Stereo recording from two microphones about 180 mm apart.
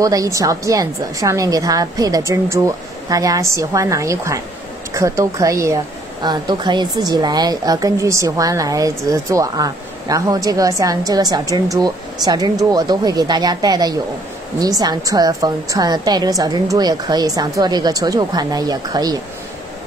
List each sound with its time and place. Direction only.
0.0 s a woman's voice: 20° right (ahead or behind)